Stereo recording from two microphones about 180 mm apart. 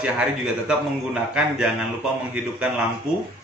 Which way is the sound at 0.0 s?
5° right (ahead or behind).